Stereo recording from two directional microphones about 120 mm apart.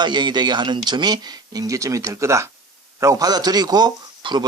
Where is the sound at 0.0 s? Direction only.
40° right (ahead or behind).